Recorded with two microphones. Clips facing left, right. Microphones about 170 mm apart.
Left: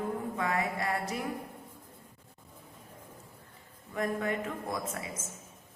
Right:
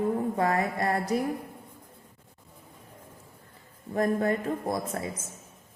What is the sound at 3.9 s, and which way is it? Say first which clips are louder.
A woman's voice: right 6 dB; 40° right (ahead or behind).